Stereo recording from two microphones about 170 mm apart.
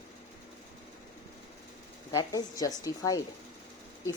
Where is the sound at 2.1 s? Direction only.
20° left (ahead or behind).